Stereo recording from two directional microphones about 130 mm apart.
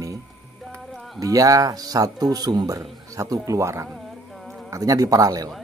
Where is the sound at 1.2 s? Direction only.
25° right (ahead or behind).